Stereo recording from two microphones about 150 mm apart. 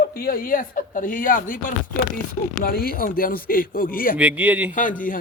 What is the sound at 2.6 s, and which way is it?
Speech, 80° left.